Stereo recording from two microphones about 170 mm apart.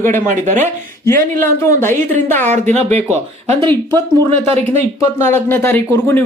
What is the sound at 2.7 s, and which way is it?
Speech, 40° right (ahead or behind).